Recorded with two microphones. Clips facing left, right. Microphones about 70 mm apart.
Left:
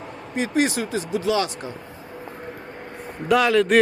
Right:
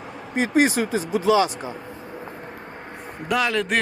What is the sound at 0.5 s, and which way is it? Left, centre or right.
Speech, right.